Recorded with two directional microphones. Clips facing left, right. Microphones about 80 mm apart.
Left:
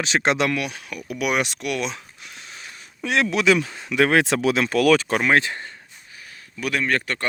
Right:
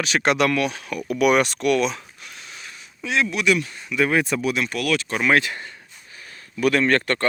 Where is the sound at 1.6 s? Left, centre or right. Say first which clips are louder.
Right 6 dB; centre.